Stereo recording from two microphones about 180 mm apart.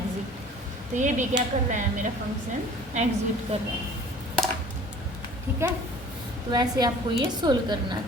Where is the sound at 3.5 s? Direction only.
30° right (ahead or behind).